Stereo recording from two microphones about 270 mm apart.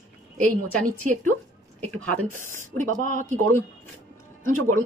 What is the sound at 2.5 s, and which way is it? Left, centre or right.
Speech, right.